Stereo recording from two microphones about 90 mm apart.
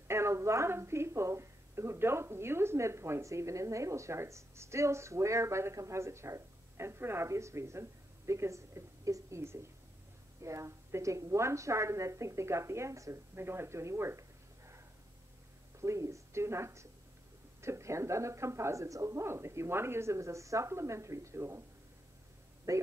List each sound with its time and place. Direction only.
0.1 s a woman's voice: 30° right (ahead or behind)
15.8 s a woman's voice: 35° right (ahead or behind)
22.7 s a woman's voice: 35° right (ahead or behind)